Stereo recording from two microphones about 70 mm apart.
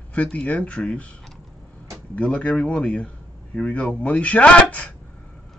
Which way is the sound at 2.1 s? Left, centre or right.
Centre.